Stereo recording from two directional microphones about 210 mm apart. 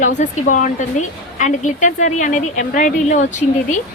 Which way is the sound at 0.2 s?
35° left (ahead or behind).